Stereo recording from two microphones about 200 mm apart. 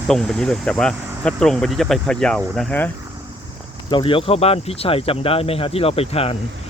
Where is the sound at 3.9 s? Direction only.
25° left (ahead or behind).